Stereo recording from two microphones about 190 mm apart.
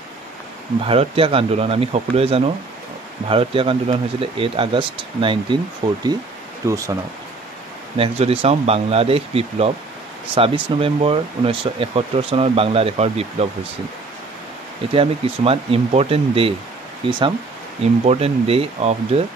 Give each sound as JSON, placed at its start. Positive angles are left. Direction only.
{"t": 0.8, "sound": "speech", "side_deg": -30}
{"t": 8.0, "sound": "speech", "side_deg": -30}
{"t": 15.0, "sound": "speech", "side_deg": -30}